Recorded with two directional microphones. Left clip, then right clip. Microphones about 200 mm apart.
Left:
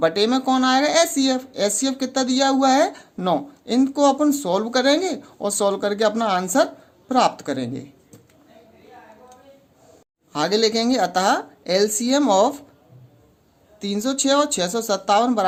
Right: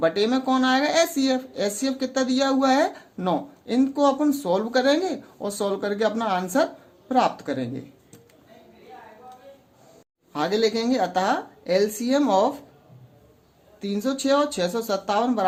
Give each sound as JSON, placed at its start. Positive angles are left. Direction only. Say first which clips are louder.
{"t": 0.0, "sound": "speech", "louder": "left 3 dB", "side_deg": 25}
{"t": 10.3, "sound": "speech", "louder": "left 3 dB", "side_deg": 25}
{"t": 13.7, "sound": "speech", "louder": "left 3 dB", "side_deg": 25}